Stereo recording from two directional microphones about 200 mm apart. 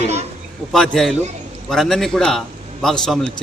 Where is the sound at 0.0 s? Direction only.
35° right (ahead or behind).